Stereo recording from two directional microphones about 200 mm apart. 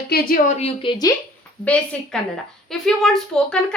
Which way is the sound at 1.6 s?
5° left (ahead or behind).